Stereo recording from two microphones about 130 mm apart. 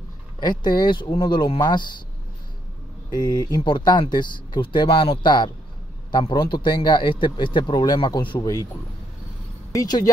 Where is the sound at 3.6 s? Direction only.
35° left (ahead or behind).